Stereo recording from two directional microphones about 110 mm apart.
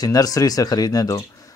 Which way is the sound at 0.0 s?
35° left (ahead or behind).